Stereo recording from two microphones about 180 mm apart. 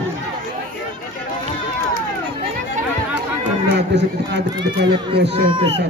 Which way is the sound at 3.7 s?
70° right (ahead or behind).